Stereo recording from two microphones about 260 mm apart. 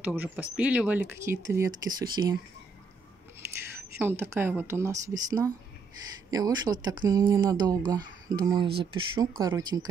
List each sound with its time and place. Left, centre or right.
0.0 s speech: centre
4.0 s speech: centre